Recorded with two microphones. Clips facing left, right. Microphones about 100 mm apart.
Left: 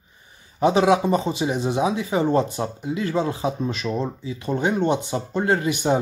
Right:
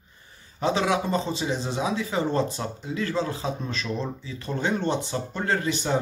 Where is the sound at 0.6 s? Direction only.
20° left (ahead or behind).